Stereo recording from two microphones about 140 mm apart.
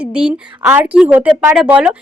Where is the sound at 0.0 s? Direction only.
5° right (ahead or behind).